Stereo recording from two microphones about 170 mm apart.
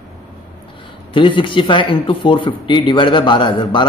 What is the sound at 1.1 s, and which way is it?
Speech, 30° left (ahead or behind).